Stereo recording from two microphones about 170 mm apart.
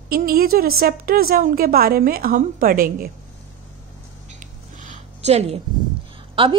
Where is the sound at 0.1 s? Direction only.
60° right (ahead or behind).